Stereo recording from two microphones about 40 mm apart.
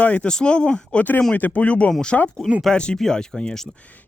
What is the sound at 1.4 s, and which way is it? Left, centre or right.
Speech, left.